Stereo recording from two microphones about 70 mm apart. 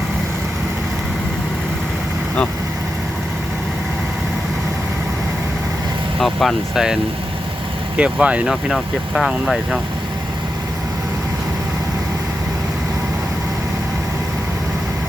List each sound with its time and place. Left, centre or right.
6.1 s speech: centre
6.7 s speech: centre
7.9 s speech: centre
8.7 s speech: centre